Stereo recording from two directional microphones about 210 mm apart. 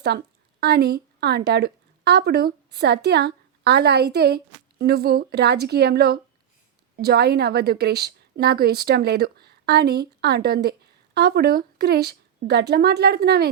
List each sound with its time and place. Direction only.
0.6 s a woman's voice: 50° right (ahead or behind)